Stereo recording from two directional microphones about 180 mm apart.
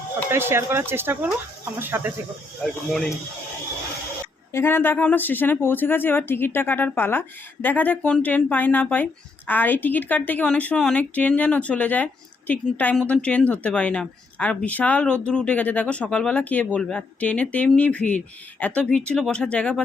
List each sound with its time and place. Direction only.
0.3 s speech: 15° right (ahead or behind)
4.5 s speech: 10° left (ahead or behind)